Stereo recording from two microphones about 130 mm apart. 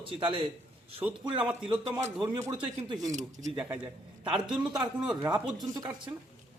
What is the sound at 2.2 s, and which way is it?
Speech, 30° right (ahead or behind).